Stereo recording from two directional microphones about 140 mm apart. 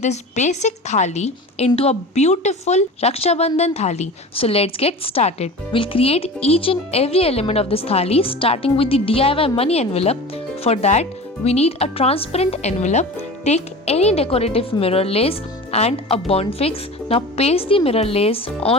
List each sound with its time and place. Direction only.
0.0 s a woman's voice: 55° left (ahead or behind)